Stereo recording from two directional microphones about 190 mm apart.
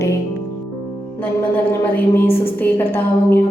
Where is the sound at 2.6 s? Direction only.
10° left (ahead or behind).